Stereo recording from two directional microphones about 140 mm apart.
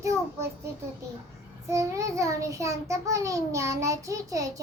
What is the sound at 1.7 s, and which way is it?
A child's voice, 20° right (ahead or behind).